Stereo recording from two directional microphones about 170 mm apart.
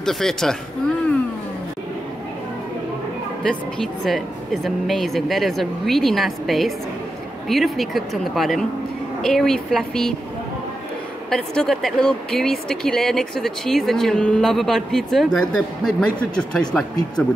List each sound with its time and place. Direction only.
0.0 s speech: 5° left (ahead or behind)
3.4 s speech: 5° left (ahead or behind)
11.2 s speech: 5° left (ahead or behind)